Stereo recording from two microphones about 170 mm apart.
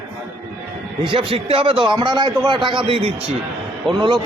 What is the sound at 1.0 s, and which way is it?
A man's voice, 30° right (ahead or behind).